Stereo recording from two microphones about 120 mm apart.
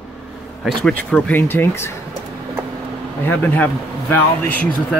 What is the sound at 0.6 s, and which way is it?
A man's voice, 10° left (ahead or behind).